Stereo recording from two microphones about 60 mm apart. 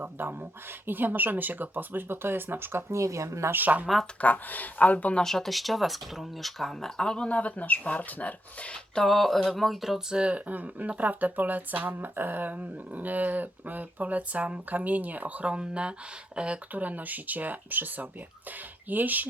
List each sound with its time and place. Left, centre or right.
0.0 s speech: right
3.0 s speech: right
3.5 s speech: right
4.2 s speech: left
5.2 s speech: centre
7.3 s speech: left
8.7 s speech: centre
10.2 s speech: right